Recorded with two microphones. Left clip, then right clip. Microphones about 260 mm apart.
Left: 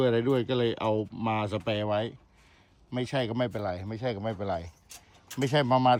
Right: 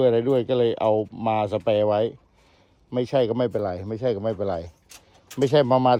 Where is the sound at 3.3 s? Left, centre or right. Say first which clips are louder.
Right 7 dB; right.